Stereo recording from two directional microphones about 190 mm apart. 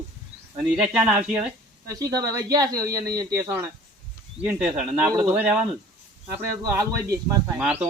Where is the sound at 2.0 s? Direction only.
20° right (ahead or behind).